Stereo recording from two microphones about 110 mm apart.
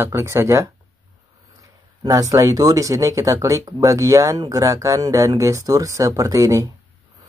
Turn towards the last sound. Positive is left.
turn(degrees=-30)  # may be behind; listen again after turning